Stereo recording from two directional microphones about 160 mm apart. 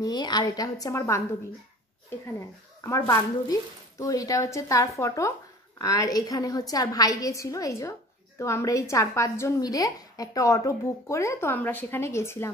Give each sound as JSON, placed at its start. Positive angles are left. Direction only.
{"t": 0.0, "sound": "speech", "side_deg": 25}
{"t": 2.8, "sound": "a woman's voice", "side_deg": 20}